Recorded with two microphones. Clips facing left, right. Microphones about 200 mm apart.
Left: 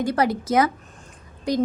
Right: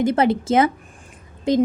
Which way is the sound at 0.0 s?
25° right (ahead or behind).